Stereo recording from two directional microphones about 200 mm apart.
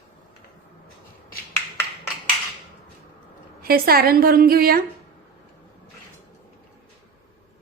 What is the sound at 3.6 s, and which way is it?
A woman's voice, 50° right (ahead or behind).